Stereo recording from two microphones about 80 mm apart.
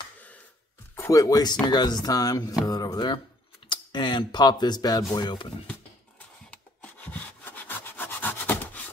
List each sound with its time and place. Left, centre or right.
0.9 s music: left
1.2 s speech: left
3.6 s speech: left
5.1 s speech: left
6.5 s wood: centre